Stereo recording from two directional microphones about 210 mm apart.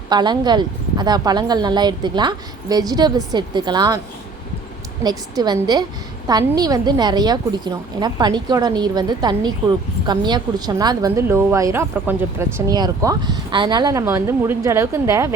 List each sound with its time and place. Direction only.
0.1 s a woman's voice: 20° right (ahead or behind)
5.0 s a woman's voice: 20° right (ahead or behind)